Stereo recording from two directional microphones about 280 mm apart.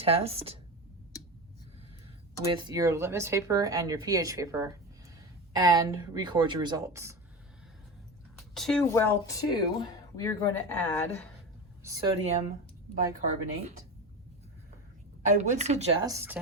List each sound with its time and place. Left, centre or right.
0.0 s speech: right
2.4 s speech: centre
8.4 s speech: centre
11.8 s speech: centre; by 13.8 s right
15.4 s speech: right
16.1 s speech: centre